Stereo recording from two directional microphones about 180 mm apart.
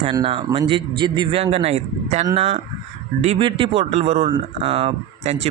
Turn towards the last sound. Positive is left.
turn(degrees=-35)  # may be behind; listen again after turning